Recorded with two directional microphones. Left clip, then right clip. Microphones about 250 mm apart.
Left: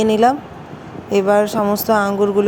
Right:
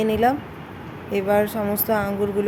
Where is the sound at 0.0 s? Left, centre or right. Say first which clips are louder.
Left 6 dB; centre.